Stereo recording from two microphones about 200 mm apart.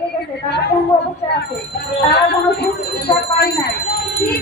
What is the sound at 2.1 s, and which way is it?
Music, 55° left (ahead or behind).